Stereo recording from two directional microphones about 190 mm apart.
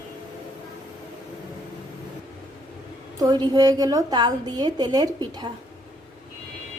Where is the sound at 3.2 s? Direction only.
20° right (ahead or behind).